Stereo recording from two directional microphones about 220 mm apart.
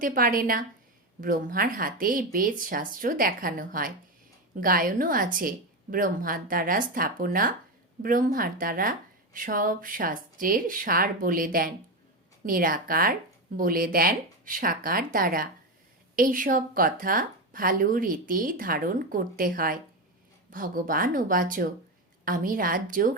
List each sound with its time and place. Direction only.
0.0 s speech: 40° right (ahead or behind)